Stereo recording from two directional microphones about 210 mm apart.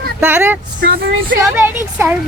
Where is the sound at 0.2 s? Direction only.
10° right (ahead or behind).